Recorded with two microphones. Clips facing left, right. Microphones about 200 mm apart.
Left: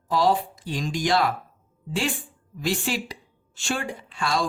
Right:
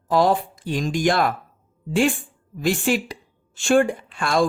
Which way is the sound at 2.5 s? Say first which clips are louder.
Right 6 dB; 50° right (ahead or behind).